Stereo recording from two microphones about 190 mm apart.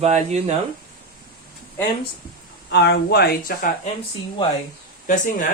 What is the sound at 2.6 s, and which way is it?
Speech, 65° left (ahead or behind).